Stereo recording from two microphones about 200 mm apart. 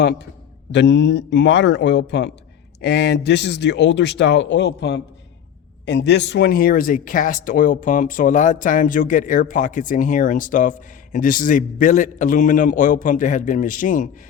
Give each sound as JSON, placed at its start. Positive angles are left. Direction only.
{"t": 0.7, "sound": "speech", "side_deg": 60}